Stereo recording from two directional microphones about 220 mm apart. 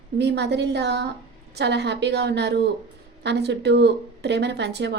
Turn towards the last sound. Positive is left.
turn(degrees=-50)  # may be behind; listen again after turning